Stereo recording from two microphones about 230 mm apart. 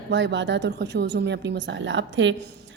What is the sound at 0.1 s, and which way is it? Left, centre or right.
A woman's voice, right.